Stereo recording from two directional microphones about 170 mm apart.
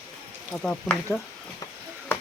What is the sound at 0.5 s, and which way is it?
Speech, 5° left (ahead or behind).